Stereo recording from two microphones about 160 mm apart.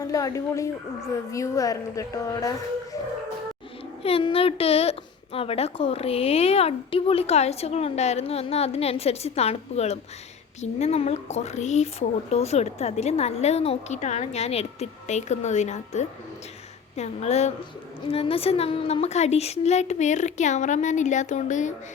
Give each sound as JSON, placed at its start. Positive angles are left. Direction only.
{"t": 0.0, "sound": "a woman's voice", "side_deg": 20}
{"t": 4.0, "sound": "a woman's voice", "side_deg": 35}